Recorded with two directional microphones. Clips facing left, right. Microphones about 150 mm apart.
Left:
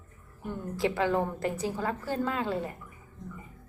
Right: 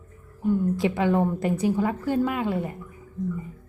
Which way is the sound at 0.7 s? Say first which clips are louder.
Right 4 dB; 20° right (ahead or behind).